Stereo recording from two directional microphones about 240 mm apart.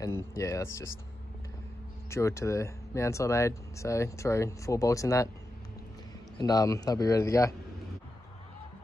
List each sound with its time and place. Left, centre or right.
0.0 s speech: centre
2.0 s speech: centre
6.3 s speech: centre